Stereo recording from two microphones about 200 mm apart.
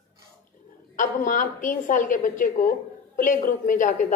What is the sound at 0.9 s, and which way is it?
A woman's voice, 40° left (ahead or behind).